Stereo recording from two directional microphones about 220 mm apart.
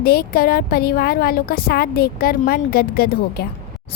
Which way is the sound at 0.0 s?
45° left (ahead or behind).